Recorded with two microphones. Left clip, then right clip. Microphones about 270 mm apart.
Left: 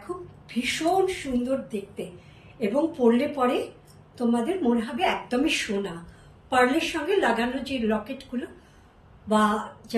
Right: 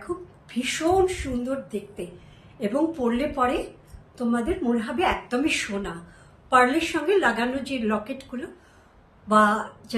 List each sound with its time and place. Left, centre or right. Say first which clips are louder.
0.5 s a woman's voice: right 1 dB; centre